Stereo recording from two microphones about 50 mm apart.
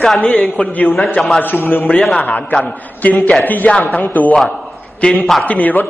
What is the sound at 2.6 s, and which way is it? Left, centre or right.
A man's voice, left.